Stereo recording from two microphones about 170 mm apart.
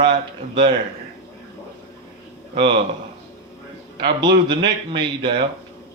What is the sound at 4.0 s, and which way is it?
A man's voice, 25° right (ahead or behind).